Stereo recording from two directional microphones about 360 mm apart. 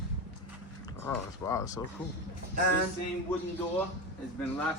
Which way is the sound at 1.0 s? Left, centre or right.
Centre.